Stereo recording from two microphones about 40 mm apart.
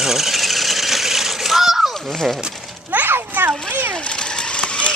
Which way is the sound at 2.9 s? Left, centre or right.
Right.